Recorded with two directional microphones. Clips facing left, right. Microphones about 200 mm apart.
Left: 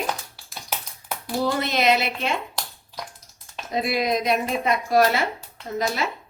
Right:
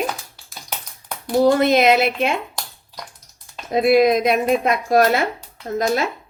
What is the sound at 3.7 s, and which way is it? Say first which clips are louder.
A woman's voice: right 9 dB; 55° right (ahead or behind).